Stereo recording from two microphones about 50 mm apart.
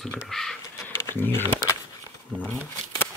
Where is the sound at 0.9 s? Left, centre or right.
Left.